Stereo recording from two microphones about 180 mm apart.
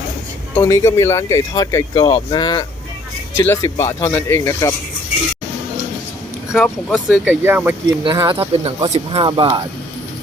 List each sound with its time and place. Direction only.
0.5 s speech: 15° left (ahead or behind)
6.5 s speech: centre (ahead or behind)
8.0 s speech: 25° right (ahead or behind)